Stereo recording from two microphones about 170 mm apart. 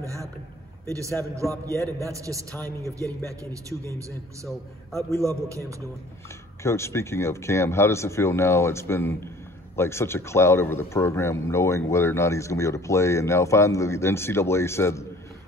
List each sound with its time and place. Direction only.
0.0 s a man's voice: 20° right (ahead or behind)
1.7 s a man's voice: 15° left (ahead or behind)
2.0 s a man's voice: 20° right (ahead or behind)
5.1 s a man's voice: 20° right (ahead or behind)
6.6 s a man's voice: 15° left (ahead or behind)